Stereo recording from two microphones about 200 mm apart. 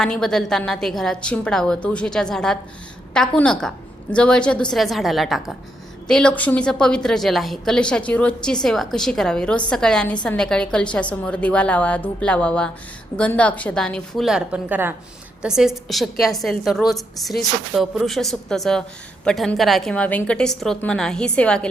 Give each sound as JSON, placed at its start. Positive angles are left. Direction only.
{"t": 0.0, "sound": "a woman's voice", "side_deg": 5}